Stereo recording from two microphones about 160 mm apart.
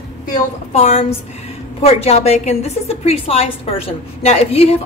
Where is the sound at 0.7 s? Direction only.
40° left (ahead or behind).